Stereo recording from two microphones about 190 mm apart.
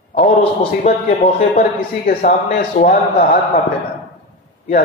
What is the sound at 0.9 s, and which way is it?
Speech, 35° left (ahead or behind).